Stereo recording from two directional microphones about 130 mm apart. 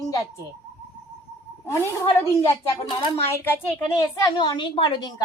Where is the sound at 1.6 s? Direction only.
20° left (ahead or behind).